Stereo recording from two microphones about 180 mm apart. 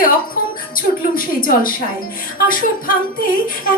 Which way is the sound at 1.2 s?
50° left (ahead or behind).